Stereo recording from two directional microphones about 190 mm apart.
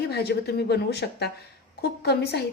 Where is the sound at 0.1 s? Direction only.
60° left (ahead or behind).